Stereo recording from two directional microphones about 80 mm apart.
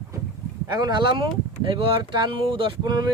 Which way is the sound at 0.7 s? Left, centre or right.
Right.